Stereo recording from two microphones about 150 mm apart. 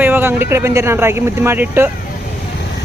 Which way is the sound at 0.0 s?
15° right (ahead or behind).